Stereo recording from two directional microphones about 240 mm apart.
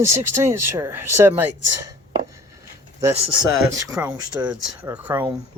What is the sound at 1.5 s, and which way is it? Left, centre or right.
Speech, right.